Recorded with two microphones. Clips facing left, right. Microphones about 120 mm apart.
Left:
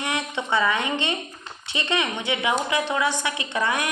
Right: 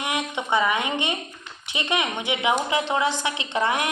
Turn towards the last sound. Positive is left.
turn(degrees=-20)  # may be behind; listen again after turning